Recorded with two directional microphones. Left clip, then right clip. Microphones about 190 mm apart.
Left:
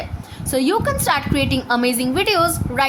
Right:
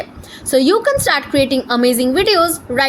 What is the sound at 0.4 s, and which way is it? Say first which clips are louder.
A woman's voice: right 6 dB; 15° right (ahead or behind).